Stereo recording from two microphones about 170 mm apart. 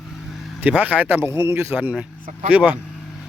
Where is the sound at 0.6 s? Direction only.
10° right (ahead or behind).